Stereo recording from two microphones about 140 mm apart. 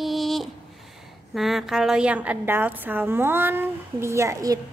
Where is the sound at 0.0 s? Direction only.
Centre (ahead or behind).